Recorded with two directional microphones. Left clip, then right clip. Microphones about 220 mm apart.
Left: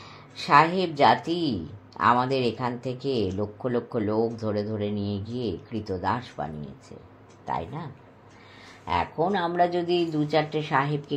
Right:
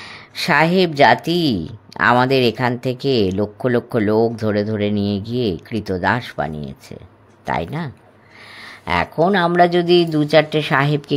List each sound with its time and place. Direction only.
0.0 s speech: 45° right (ahead or behind)